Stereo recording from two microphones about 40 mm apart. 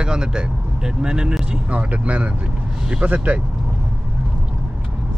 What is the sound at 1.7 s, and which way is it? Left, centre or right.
Speech, right.